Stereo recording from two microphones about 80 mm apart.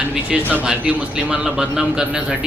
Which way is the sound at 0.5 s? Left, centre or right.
Centre.